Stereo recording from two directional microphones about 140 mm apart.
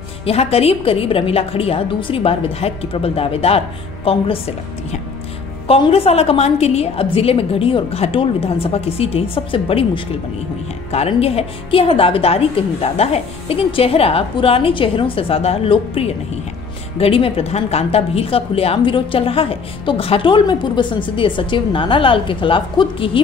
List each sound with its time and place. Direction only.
0.2 s a woman's voice: 45° left (ahead or behind)
5.7 s a woman's voice: 45° left (ahead or behind)